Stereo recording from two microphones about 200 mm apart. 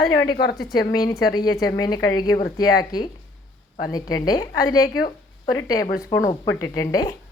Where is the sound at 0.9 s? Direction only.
20° left (ahead or behind).